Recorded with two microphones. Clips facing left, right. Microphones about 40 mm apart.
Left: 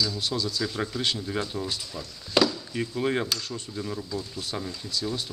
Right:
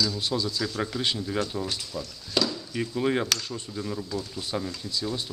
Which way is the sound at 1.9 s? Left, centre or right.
Centre.